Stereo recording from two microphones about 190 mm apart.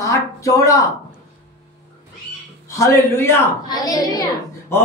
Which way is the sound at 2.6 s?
15° left (ahead or behind).